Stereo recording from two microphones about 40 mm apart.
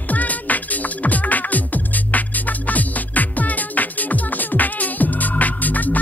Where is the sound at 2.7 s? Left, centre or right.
Left.